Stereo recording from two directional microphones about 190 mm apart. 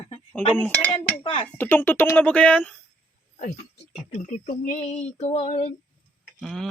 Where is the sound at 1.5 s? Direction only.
10° left (ahead or behind).